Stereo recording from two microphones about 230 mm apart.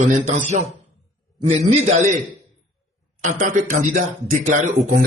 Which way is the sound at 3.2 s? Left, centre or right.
Right.